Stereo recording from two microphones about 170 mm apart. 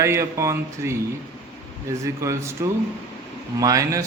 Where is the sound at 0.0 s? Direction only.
15° right (ahead or behind).